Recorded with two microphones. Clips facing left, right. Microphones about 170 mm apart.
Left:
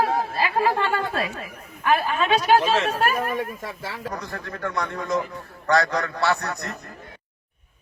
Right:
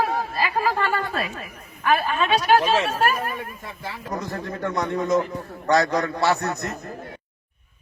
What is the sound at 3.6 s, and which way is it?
Speech, 90° left.